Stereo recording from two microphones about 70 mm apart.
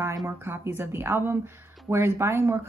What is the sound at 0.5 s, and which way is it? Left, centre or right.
Speech, right.